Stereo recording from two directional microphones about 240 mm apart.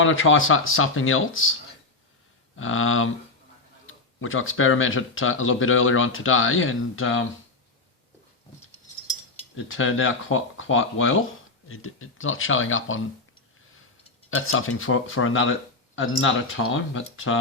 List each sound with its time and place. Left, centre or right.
0.0 s speech: left
2.6 s speech: left
9.6 s speech: left
14.3 s speech: left
16.7 s speech: left